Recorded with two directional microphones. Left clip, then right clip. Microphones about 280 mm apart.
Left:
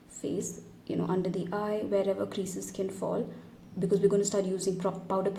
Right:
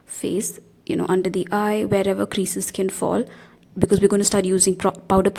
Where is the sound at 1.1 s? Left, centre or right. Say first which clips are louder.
Right 12 dB; right.